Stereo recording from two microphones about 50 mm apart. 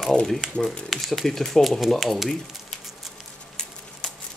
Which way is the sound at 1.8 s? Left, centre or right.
Centre.